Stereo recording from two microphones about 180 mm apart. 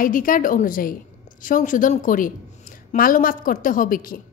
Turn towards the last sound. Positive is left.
turn(degrees=50)  # may be behind; listen again after turning